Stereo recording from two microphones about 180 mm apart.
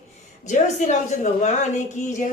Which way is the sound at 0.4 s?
40° left (ahead or behind).